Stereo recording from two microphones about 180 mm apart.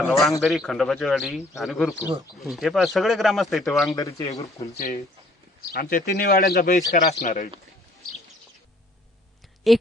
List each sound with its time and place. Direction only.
0.1 s speech: centre (ahead or behind)
3.9 s speech: 20° left (ahead or behind)
4.7 s speech: 55° left (ahead or behind)
9.7 s speech: centre (ahead or behind)